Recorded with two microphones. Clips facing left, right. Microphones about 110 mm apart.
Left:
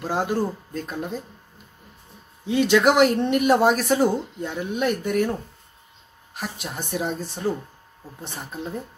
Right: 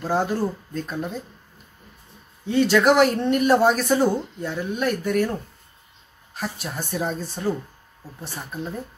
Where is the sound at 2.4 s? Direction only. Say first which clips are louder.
Even; 15° left (ahead or behind).